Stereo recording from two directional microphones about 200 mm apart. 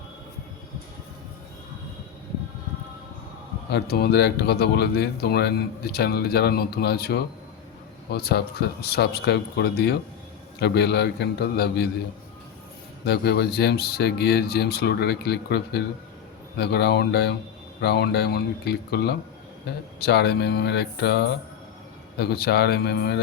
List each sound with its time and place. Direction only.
3.7 s speech: 55° left (ahead or behind)
13.1 s speech: 55° left (ahead or behind)